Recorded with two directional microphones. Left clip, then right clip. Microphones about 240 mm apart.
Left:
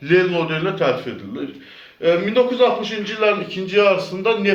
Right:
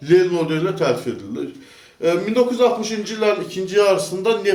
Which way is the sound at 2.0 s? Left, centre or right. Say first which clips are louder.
Left 1 dB; right.